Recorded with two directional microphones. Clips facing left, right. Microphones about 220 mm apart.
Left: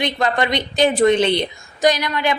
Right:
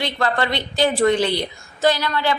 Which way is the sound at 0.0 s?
20° left (ahead or behind).